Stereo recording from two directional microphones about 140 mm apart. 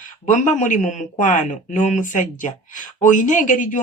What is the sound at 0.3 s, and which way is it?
Speech, 65° left (ahead or behind).